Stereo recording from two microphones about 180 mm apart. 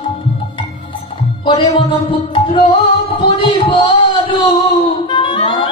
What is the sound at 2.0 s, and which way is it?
Music, 25° left (ahead or behind).